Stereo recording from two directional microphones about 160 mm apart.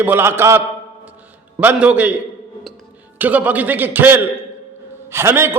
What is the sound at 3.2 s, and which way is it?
A man's voice, 10° right (ahead or behind).